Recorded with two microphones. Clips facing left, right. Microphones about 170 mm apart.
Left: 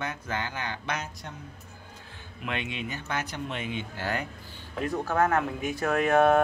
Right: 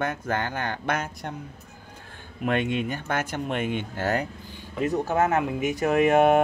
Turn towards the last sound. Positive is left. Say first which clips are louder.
# right 3 dB
turn(degrees=-20)  # may be behind; listen again after turning